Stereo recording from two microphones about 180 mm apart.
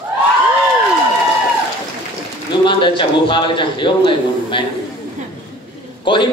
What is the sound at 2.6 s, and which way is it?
A man's voice, 30° left (ahead or behind).